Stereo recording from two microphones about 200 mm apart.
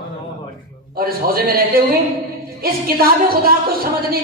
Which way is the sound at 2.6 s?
50° right (ahead or behind).